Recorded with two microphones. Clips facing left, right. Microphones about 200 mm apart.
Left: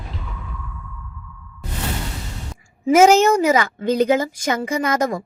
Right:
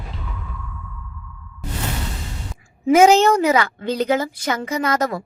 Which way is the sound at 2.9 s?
10° left (ahead or behind).